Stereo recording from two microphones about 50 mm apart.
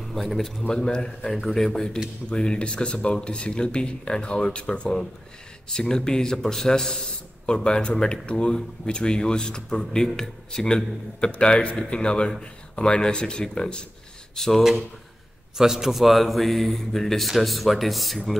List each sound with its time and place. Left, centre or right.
0.0 s a man's voice: centre
0.7 s a man's voice: centre
14.3 s speech: centre
15.5 s a man's voice: centre